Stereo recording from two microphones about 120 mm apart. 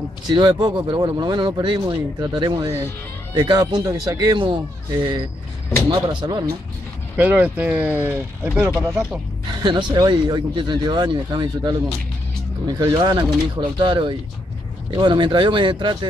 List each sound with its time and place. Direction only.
0.3 s speech: 40° right (ahead or behind)
7.2 s speech: 10° right (ahead or behind)
9.5 s speech: 40° right (ahead or behind)